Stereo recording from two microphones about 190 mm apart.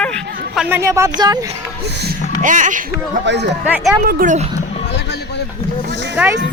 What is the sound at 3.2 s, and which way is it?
Speech, 65° right (ahead or behind).